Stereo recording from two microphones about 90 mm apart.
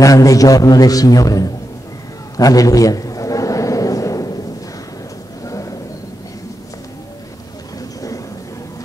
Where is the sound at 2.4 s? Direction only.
40° left (ahead or behind).